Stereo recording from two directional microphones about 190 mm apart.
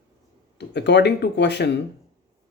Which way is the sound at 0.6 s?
65° left (ahead or behind).